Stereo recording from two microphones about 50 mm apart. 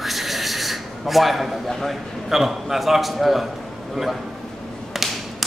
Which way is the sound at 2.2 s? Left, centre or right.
Centre.